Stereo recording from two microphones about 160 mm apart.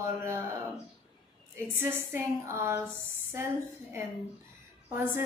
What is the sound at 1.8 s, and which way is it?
A woman's voice, 15° right (ahead or behind).